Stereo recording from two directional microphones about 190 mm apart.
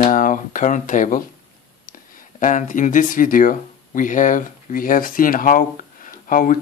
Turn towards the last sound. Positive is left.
turn(degrees=45)  # may be behind; listen again after turning